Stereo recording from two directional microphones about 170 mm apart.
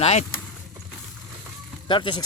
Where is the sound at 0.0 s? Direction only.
40° left (ahead or behind).